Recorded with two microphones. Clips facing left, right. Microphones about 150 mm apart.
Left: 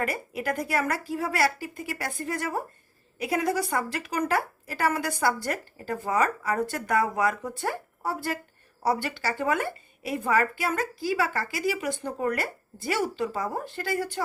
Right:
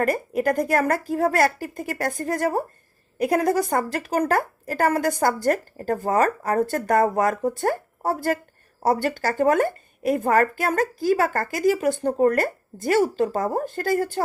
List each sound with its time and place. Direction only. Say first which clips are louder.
0.0 s speech: right 8 dB; 45° right (ahead or behind)